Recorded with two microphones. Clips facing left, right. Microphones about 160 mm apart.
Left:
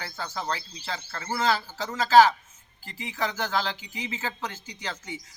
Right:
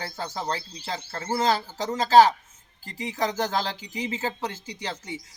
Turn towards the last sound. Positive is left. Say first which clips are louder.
# right 3 dB
turn(degrees=-35)  # may be behind; listen again after turning